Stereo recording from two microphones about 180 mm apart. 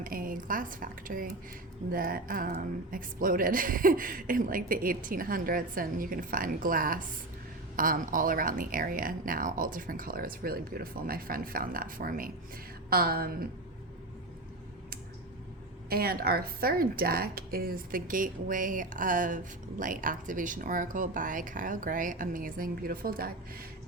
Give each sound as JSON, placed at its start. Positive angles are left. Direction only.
{"t": 0.0, "sound": "a woman's voice", "side_deg": -50}
{"t": 15.9, "sound": "a woman's voice", "side_deg": -55}